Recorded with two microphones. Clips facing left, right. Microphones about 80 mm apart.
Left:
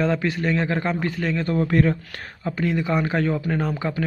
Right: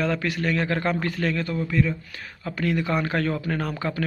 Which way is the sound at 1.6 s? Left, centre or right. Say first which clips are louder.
Left 5 dB; left.